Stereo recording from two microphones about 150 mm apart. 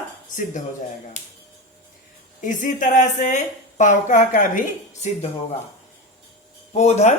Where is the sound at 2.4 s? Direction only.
60° left (ahead or behind).